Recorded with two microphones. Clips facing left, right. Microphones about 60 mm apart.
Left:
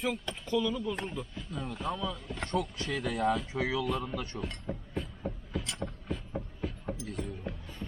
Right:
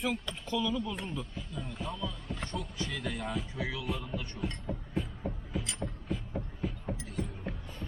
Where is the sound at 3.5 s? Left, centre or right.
Left.